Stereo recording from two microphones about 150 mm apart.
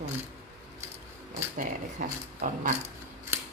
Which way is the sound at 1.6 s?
55° right (ahead or behind).